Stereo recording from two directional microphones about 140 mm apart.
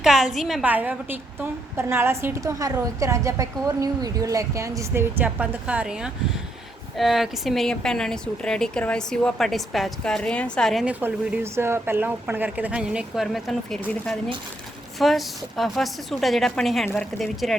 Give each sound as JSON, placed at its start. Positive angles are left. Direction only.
{"t": 0.0, "sound": "a woman's voice", "side_deg": -5}
{"t": 10.8, "sound": "a woman's voice", "side_deg": -10}